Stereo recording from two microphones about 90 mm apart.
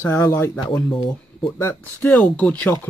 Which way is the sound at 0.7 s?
15° left (ahead or behind).